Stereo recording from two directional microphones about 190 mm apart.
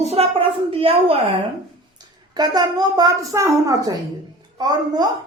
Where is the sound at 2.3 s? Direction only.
20° right (ahead or behind).